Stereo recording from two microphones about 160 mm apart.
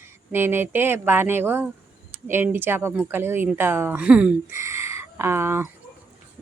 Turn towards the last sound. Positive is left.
turn(degrees=-15)  # may be behind; listen again after turning